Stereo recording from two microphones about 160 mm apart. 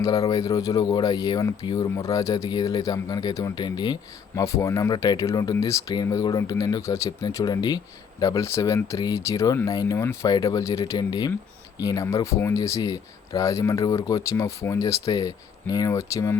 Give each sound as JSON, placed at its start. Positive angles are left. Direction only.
{"t": 0.0, "sound": "speech", "side_deg": 20}